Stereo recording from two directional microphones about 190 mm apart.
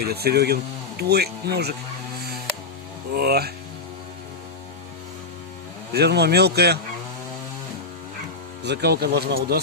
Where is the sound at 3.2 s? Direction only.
55° right (ahead or behind).